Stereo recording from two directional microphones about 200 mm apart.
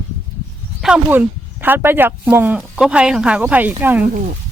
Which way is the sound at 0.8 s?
5° right (ahead or behind).